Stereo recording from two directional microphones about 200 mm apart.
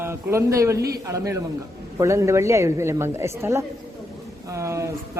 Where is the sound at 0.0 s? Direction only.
15° right (ahead or behind).